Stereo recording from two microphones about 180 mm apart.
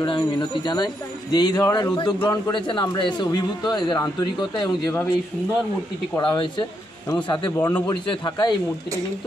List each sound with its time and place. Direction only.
0.0 s speech: 25° left (ahead or behind)
2.1 s a man's voice: 10° left (ahead or behind)
2.5 s speech: 25° left (ahead or behind)
6.1 s speech: 25° left (ahead or behind)